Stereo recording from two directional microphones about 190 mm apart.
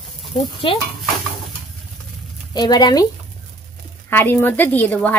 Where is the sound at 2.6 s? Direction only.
25° left (ahead or behind).